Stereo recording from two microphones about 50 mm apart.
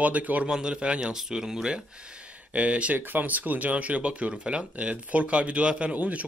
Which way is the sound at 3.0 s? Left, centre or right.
Right.